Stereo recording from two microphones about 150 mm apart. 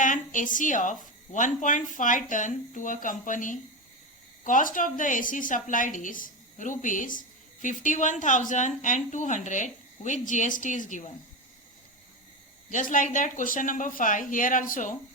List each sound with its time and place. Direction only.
0.0 s a woman's voice: 60° left (ahead or behind)
12.7 s a woman's voice: 60° left (ahead or behind)